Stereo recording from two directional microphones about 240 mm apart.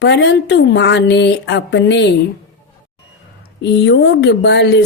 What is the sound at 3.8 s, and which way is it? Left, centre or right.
Speech, left.